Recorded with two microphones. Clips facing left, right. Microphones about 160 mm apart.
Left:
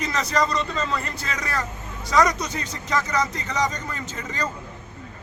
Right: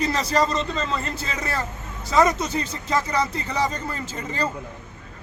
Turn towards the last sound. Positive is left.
turn(degrees=-30)  # may be behind; listen again after turning